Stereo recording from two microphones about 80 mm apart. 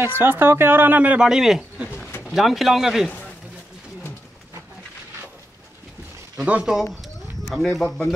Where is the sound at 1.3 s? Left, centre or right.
Centre.